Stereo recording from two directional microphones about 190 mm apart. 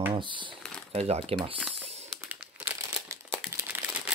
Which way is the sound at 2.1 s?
5° right (ahead or behind).